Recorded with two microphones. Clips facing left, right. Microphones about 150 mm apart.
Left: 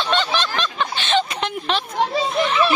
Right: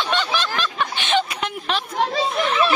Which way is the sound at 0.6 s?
10° right (ahead or behind).